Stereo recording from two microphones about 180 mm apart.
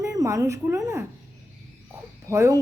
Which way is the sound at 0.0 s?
20° right (ahead or behind).